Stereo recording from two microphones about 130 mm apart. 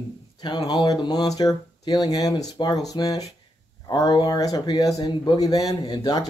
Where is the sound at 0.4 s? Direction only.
35° left (ahead or behind).